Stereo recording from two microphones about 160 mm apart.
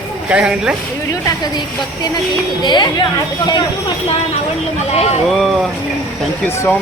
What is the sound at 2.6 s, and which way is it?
Speech, 30° left (ahead or behind).